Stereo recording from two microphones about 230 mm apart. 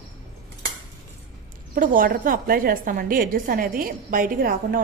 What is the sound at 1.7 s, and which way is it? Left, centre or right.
A woman's voice, right.